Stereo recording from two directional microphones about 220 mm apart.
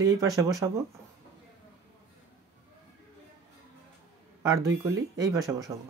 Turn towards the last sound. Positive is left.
turn(degrees=-15)  # may be behind; listen again after turning